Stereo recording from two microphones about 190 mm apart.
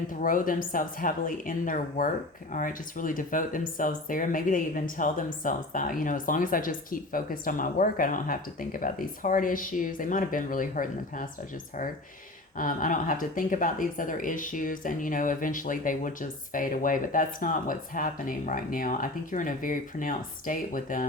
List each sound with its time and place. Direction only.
0.1 s speech: 45° left (ahead or behind)
12.5 s speech: 45° left (ahead or behind)